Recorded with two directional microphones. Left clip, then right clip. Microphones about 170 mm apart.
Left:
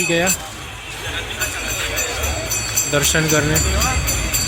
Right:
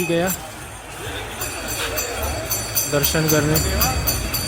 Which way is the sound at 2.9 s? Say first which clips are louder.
Left 2 dB; 10° right (ahead or behind).